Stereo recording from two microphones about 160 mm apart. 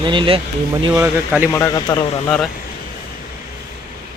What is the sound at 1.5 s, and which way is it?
Speech, 20° left (ahead or behind).